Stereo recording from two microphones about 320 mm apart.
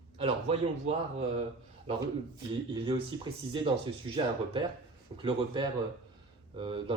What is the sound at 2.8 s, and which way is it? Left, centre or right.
Speech, centre.